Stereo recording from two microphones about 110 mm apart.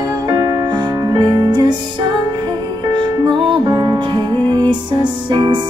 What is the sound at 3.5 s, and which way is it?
Music, 40° right (ahead or behind).